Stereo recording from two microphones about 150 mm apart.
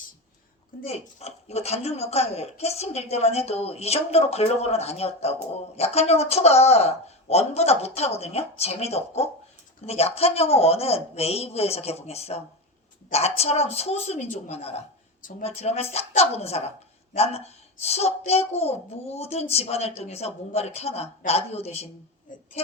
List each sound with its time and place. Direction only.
0.9 s speech: 45° left (ahead or behind)
22.3 s speech: 60° left (ahead or behind)